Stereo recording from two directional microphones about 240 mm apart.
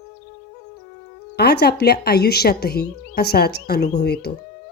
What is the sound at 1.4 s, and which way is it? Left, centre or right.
Speech, left.